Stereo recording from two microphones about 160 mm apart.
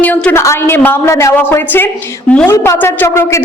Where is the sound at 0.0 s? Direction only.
10° left (ahead or behind).